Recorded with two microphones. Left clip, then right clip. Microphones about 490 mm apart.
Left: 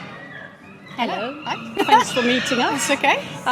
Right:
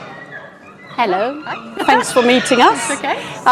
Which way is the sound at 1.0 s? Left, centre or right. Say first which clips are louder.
Right 8 dB; right.